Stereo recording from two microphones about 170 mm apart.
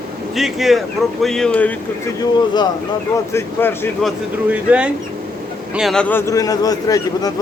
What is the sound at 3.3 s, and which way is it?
Speech, 15° left (ahead or behind).